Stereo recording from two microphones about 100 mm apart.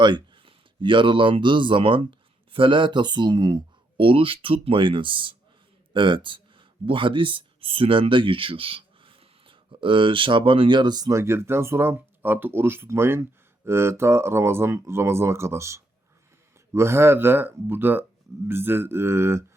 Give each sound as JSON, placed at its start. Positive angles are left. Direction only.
{"t": 0.0, "sound": "speech", "side_deg": -55}
{"t": 11.2, "sound": "speech", "side_deg": -25}